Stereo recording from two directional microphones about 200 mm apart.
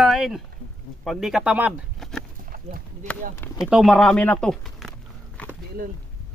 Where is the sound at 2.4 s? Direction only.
45° right (ahead or behind).